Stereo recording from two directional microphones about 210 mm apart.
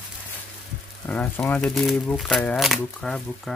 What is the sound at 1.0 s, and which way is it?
Speech, 5° left (ahead or behind).